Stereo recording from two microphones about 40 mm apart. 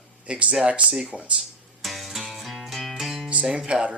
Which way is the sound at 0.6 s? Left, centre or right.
Right.